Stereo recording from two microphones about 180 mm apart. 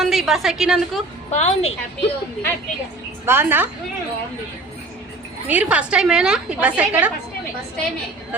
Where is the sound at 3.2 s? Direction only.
10° right (ahead or behind).